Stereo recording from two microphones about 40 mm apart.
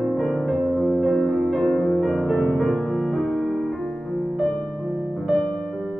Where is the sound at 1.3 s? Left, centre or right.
Centre.